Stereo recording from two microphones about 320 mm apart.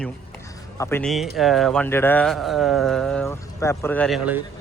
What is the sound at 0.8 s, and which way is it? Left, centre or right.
Speech, centre.